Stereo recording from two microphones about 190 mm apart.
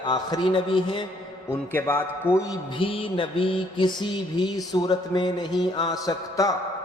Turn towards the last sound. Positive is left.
turn(degrees=20)  # may be behind; listen again after turning